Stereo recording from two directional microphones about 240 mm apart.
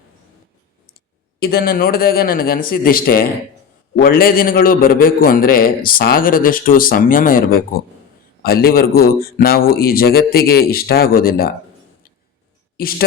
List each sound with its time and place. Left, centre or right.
1.4 s a man's voice: left
12.7 s speech: left